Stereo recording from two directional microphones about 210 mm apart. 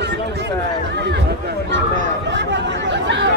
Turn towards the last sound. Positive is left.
turn(degrees=-60)  # may be behind; listen again after turning